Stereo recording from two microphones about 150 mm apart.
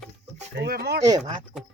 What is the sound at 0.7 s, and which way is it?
Speech, 90° right.